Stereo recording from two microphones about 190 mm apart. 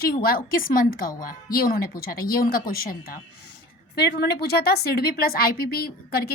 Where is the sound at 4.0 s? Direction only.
55° left (ahead or behind).